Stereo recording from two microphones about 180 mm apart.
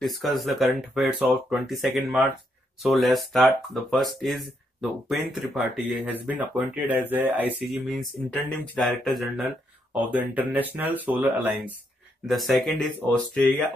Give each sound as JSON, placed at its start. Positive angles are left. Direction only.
{"t": 0.0, "sound": "speech", "side_deg": 0}